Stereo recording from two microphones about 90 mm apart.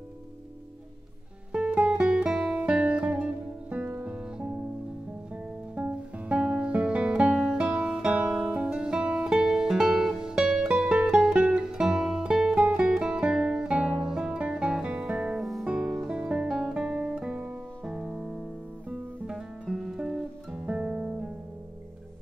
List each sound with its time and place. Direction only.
1.5 s music: 10° right (ahead or behind)
4.1 s music: 10° right (ahead or behind)
15.4 s guitar: 5° right (ahead or behind)